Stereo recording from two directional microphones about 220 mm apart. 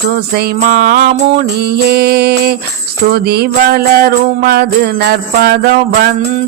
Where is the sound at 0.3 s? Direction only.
45° right (ahead or behind).